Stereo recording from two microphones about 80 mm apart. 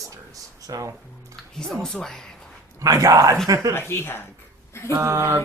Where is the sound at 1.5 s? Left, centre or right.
Centre.